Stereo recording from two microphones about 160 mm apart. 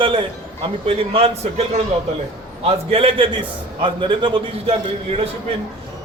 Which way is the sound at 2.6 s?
35° right (ahead or behind).